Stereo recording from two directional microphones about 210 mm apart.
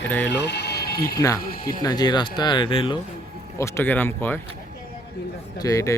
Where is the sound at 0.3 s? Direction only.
55° left (ahead or behind).